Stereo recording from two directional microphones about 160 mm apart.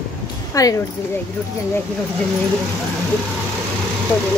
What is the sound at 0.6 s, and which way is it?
Speech, 20° left (ahead or behind).